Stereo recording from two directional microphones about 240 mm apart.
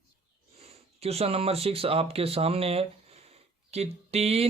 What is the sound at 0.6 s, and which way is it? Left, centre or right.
Speech, right.